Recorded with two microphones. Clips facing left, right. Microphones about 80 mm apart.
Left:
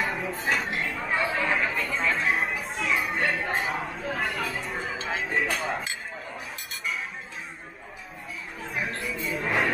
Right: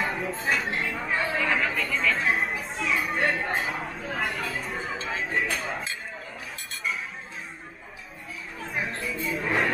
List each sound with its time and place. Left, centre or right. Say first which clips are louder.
0.0 s a sound: even; centre
1.9 s music: right 1 dB; left
2.1 s chatter: even; centre
3.2 s a sound: right 1 dB; centre
4.6 s music: even; centre
5.0 s cutlery: left 1 dB; centre
8.6 s music: even; centre